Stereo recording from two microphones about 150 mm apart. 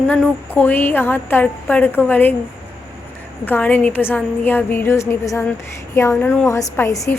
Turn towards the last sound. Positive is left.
turn(degrees=20)  # may be behind; listen again after turning